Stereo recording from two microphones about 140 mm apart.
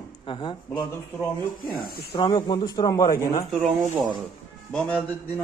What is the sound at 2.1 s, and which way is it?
A man's voice, 30° left (ahead or behind).